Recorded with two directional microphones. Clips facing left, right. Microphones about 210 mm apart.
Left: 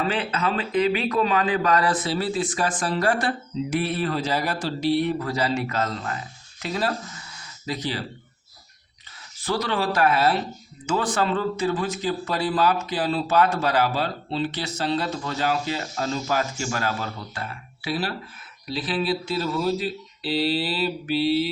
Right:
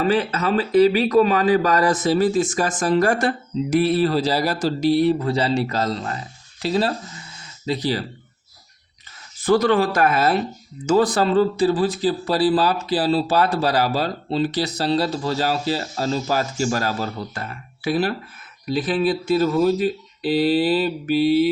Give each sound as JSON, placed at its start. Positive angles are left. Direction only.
{"t": 0.0, "sound": "speech", "side_deg": -40}
{"t": 9.4, "sound": "speech", "side_deg": -50}
{"t": 17.8, "sound": "speech", "side_deg": -50}